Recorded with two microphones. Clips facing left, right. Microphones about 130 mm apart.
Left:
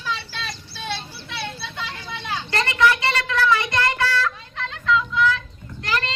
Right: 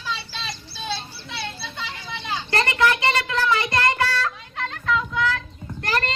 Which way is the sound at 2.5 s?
30° right (ahead or behind).